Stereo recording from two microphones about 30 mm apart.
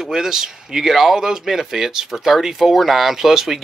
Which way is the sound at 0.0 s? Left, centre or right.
Centre.